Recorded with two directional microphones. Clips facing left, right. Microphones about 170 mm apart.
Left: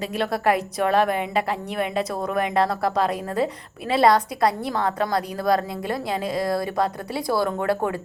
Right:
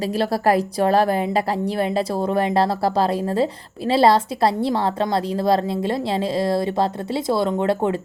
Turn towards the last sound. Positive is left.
turn(degrees=-25)  # may be behind; listen again after turning